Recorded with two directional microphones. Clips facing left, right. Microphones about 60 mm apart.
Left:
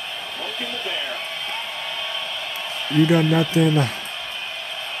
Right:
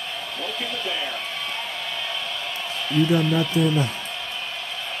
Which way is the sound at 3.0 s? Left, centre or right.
Left.